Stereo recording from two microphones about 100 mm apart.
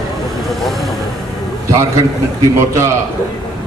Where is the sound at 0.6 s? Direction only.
Centre (ahead or behind).